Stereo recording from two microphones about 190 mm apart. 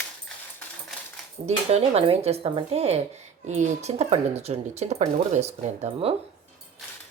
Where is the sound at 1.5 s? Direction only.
35° right (ahead or behind).